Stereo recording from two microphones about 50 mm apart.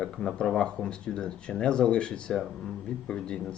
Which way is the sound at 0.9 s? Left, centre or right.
Centre.